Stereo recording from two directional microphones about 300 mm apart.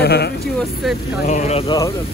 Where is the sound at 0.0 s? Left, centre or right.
Left.